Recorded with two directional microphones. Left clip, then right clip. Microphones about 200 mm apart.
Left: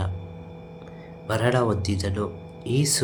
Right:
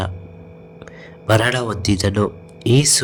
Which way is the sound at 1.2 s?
40° right (ahead or behind).